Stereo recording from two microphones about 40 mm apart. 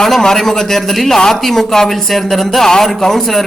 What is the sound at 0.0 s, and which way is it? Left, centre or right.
Speech, centre.